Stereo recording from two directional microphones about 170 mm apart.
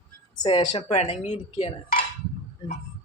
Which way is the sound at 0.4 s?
25° left (ahead or behind).